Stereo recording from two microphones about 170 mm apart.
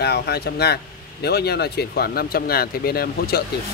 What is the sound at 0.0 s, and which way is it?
Speech, 70° left (ahead or behind).